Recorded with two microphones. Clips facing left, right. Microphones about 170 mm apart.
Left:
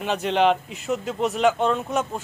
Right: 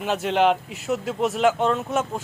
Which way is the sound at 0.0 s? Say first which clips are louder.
Even; 5° right (ahead or behind).